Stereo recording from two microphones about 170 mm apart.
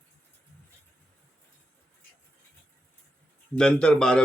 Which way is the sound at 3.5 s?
5° left (ahead or behind).